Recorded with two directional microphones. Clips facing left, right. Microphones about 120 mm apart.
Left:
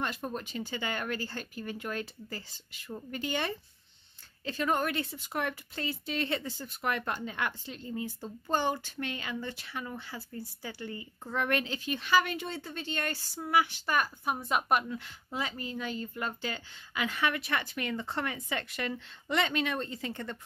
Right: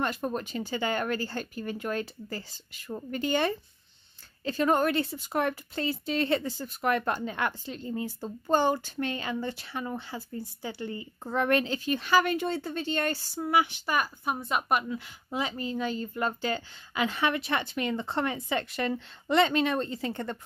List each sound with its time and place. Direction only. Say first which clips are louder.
0.0 s speech: right 5 dB; 45° right (ahead or behind); by 13.9 s 15° right (ahead or behind)
13.9 s a woman's voice: right 1 dB; centre (ahead or behind)
15.3 s speech: right 5 dB; 25° right (ahead or behind)